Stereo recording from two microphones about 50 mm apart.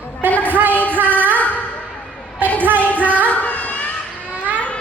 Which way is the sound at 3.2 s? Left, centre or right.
Left.